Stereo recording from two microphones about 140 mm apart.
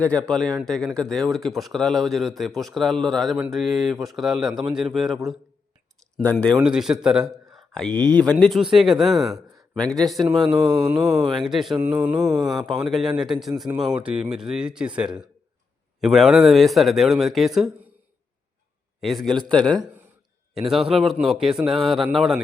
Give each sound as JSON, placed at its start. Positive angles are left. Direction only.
{"t": 0.0, "sound": "a man's voice", "side_deg": 10}
{"t": 6.7, "sound": "a man's voice", "side_deg": -5}
{"t": 10.4, "sound": "speech", "side_deg": -35}
{"t": 11.3, "sound": "a man's voice", "side_deg": 0}
{"t": 11.8, "sound": "mantra", "side_deg": -10}
{"t": 12.2, "sound": "a man's voice", "side_deg": 0}
{"t": 18.9, "sound": "a man's voice", "side_deg": 0}